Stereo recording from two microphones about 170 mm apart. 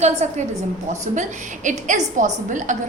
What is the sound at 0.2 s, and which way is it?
A woman's voice, 45° right (ahead or behind).